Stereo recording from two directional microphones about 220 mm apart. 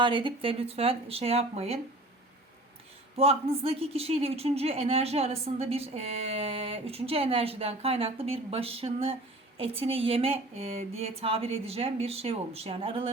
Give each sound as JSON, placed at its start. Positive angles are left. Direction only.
{"t": 0.0, "sound": "a woman's voice", "side_deg": -20}
{"t": 3.2, "sound": "a woman's voice", "side_deg": -25}